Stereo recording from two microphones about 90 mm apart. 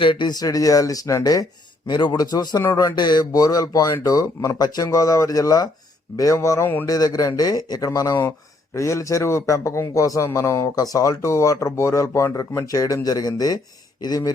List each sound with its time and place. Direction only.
0.0 s a man's voice: 65° left (ahead or behind); by 1.5 s 40° left (ahead or behind)
1.9 s a man's voice: 50° left (ahead or behind)
2.9 s a man's voice: 55° left (ahead or behind)